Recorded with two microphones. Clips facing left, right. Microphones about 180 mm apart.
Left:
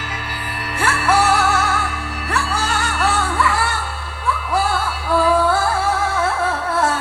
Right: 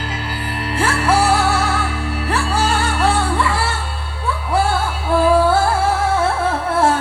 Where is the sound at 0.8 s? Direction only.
30° right (ahead or behind).